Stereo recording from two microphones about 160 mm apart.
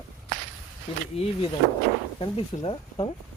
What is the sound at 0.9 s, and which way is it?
Speech, 35° left (ahead or behind).